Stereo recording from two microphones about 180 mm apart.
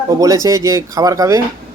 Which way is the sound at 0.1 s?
20° right (ahead or behind).